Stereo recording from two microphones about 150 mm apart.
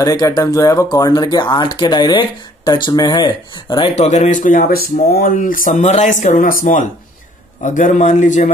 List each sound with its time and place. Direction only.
0.0 s speech: 25° left (ahead or behind)
3.9 s speech: 45° left (ahead or behind); by 6.8 s 65° left (ahead or behind)
7.6 s a man's voice: 55° left (ahead or behind)